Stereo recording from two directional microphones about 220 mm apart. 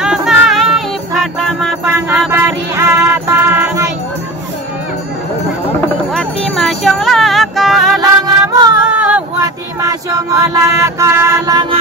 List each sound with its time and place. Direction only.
0.0 s music: 5° right (ahead or behind)
6.1 s music: centre (ahead or behind)
8.3 s music: 15° right (ahead or behind)
8.8 s a sound: 5° right (ahead or behind)
9.4 s a sound: 15° right (ahead or behind)
10.4 s music: 15° right (ahead or behind)